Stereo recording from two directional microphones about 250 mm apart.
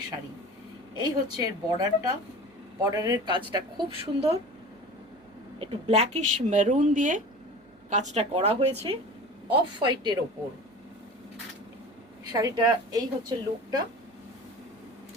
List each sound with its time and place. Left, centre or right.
0.9 s a woman's voice: centre
5.5 s a woman's voice: right
12.2 s a woman's voice: centre